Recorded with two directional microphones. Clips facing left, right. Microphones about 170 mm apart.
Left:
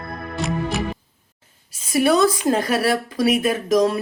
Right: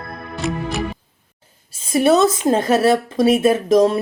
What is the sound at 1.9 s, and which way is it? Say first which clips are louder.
Speech: right 2 dB; 25° right (ahead or behind).